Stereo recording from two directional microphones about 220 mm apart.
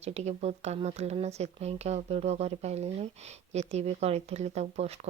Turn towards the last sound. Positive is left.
turn(degrees=-30)  # may be behind; listen again after turning